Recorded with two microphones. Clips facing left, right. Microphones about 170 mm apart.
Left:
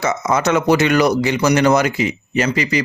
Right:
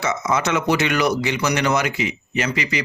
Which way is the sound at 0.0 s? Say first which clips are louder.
Left 4 dB; 40° left (ahead or behind).